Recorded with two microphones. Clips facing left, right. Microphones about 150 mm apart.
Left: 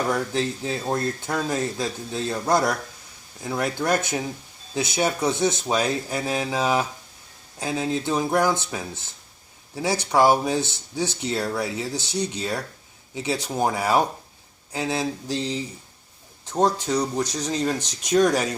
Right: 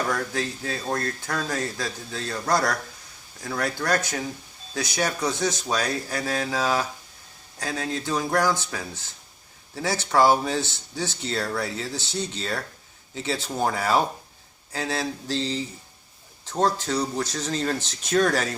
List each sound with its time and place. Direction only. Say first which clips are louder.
0.1 s speech: left 3 dB; 20° left (ahead or behind)